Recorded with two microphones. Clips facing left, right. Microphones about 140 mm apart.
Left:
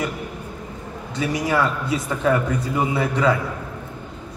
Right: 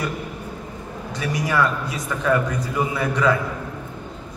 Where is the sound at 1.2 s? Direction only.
25° left (ahead or behind).